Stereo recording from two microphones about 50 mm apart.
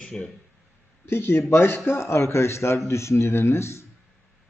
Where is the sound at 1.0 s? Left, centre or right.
Left.